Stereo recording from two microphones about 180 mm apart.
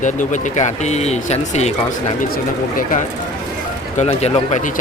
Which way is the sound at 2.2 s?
50° left (ahead or behind).